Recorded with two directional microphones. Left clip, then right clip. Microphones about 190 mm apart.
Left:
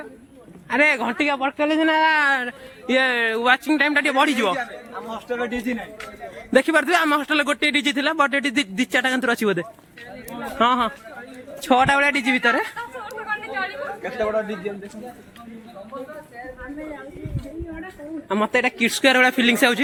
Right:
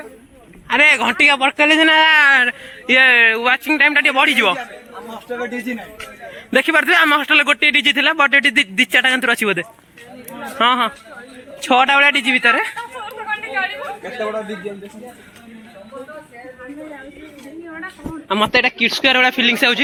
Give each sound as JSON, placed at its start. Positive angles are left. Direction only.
{"t": 0.7, "sound": "speech", "side_deg": 5}
{"t": 1.2, "sound": "speech", "side_deg": -20}
{"t": 4.5, "sound": "chatter", "side_deg": -25}
{"t": 6.5, "sound": "speech", "side_deg": 0}
{"t": 10.6, "sound": "speech", "side_deg": 0}
{"t": 12.7, "sound": "chatter", "side_deg": -40}
{"t": 18.3, "sound": "speech", "side_deg": -5}
{"t": 18.8, "sound": "speech", "side_deg": 20}